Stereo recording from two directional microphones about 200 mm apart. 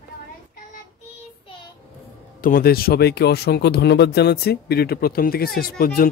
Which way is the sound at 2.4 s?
45° left (ahead or behind).